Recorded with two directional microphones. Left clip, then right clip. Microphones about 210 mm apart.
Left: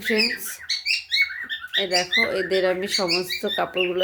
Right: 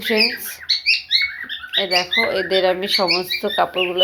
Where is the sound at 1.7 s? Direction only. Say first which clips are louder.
Right 3 dB; 10° left (ahead or behind).